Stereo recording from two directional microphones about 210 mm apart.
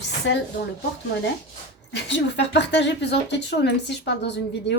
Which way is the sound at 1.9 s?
55° left (ahead or behind).